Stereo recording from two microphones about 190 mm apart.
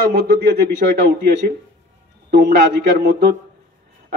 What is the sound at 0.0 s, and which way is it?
A man's voice, 55° right (ahead or behind).